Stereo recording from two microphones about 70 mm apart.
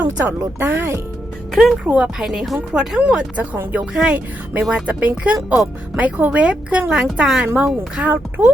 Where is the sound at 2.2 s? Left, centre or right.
Centre.